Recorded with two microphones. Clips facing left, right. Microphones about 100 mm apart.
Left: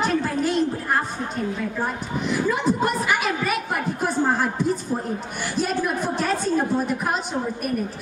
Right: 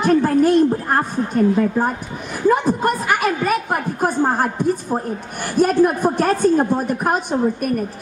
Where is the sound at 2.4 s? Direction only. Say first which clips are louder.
Right 8 dB; 45° right (ahead or behind).